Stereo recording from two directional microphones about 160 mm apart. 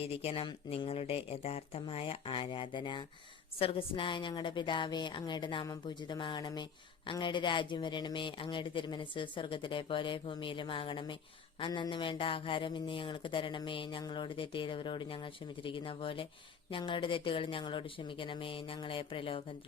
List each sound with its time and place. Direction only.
0.0 s a woman's voice: 35° left (ahead or behind)